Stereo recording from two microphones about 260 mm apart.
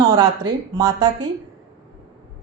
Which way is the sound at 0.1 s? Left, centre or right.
Centre.